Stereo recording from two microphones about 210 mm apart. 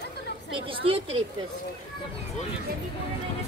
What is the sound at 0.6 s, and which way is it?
Speech, 25° right (ahead or behind).